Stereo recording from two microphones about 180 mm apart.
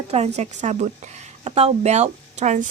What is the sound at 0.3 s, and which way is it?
A woman's voice, 40° right (ahead or behind).